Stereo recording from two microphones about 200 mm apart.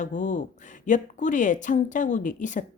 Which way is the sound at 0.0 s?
40° left (ahead or behind).